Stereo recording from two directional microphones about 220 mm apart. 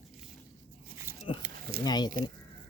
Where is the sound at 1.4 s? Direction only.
45° right (ahead or behind).